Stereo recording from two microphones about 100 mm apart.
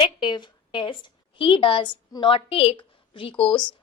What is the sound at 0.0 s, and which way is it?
A woman's voice, 50° left (ahead or behind).